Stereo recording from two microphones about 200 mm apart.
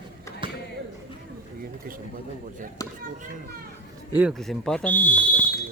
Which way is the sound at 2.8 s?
20° left (ahead or behind).